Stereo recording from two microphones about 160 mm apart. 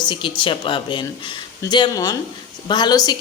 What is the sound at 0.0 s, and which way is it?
A woman's voice, 30° left (ahead or behind).